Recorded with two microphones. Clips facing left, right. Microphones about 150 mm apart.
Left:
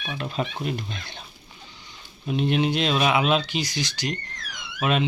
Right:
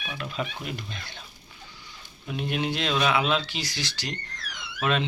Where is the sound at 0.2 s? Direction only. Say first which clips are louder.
Left 4 dB; 30° left (ahead or behind).